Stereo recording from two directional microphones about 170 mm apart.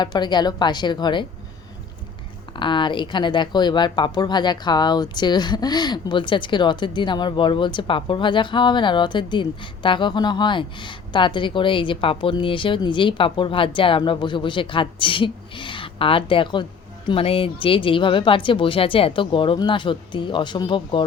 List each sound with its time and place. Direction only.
0.0 s speech: 25° left (ahead or behind)
2.5 s speech: 30° left (ahead or behind)